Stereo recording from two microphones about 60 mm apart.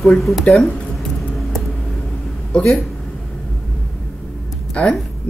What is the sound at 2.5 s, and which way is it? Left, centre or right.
Speech, centre.